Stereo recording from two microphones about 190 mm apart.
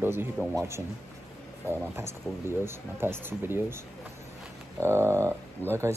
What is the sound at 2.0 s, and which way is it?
Speech, 10° right (ahead or behind).